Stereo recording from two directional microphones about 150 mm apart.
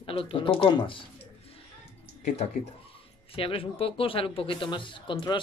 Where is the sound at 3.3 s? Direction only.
40° left (ahead or behind).